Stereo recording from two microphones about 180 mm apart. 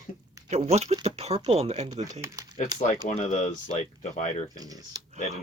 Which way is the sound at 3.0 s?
40° left (ahead or behind).